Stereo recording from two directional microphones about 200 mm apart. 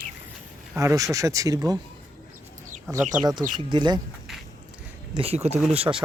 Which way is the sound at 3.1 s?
5° right (ahead or behind).